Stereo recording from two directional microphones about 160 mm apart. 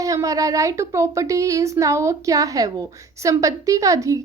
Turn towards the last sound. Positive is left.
turn(degrees=-20)  # may be behind; listen again after turning